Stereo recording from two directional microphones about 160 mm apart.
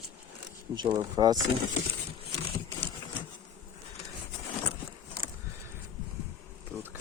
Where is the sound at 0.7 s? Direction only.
25° right (ahead or behind).